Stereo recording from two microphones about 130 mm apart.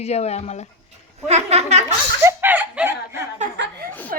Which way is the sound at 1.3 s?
60° right (ahead or behind).